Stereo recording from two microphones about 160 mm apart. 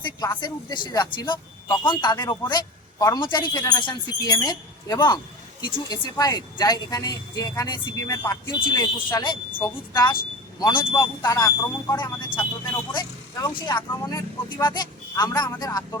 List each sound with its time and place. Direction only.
0.2 s speech: 25° left (ahead or behind)
9.5 s a woman's voice: 10° left (ahead or behind)
9.9 s speech: 25° left (ahead or behind)
13.6 s speech: 30° left (ahead or behind)